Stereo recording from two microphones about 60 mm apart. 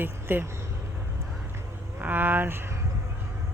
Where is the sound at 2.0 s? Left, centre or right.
Right.